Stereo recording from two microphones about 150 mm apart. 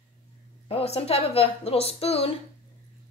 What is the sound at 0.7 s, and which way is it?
A woman's voice, 40° left (ahead or behind).